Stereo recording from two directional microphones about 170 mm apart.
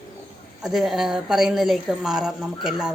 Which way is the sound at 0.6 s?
Centre (ahead or behind).